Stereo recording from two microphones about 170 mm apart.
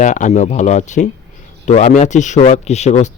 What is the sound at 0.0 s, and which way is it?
Speech, 45° left (ahead or behind).